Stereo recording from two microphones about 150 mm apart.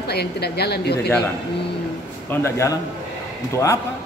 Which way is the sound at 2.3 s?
20° left (ahead or behind).